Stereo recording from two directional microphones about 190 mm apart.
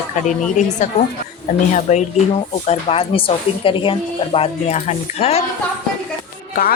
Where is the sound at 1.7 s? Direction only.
35° left (ahead or behind).